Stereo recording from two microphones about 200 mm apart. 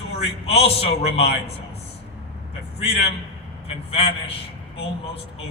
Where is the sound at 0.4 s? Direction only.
30° left (ahead or behind).